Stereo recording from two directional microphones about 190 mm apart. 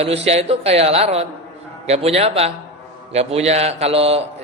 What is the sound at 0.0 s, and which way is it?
A man's voice, 35° right (ahead or behind).